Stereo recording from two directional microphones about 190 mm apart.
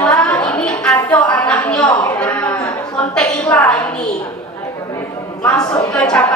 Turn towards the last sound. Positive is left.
turn(degrees=5)  # may be behind; listen again after turning